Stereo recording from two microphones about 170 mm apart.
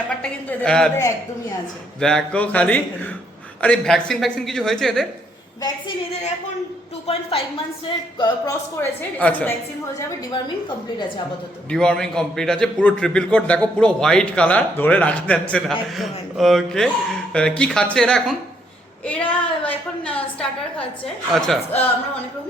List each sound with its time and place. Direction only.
0.2 s a man's voice: 5° left (ahead or behind)
0.9 s speech: 20° left (ahead or behind)
2.0 s a woman's voice: 5° left (ahead or behind)
7.1 s a woman's voice: 35° left (ahead or behind)
8.8 s a woman's voice: 10° left (ahead or behind)
11.7 s a man's voice: 5° left (ahead or behind)
19.6 s a woman's voice: 10° left (ahead or behind)